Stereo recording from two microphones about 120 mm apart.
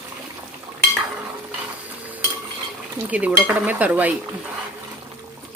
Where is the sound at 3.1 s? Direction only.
10° right (ahead or behind).